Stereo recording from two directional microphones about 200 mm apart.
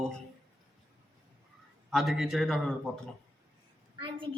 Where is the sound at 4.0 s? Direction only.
25° right (ahead or behind).